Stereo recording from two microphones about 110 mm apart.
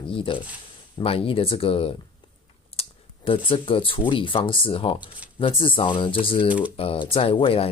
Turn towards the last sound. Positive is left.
turn(degrees=55)  # may be behind; listen again after turning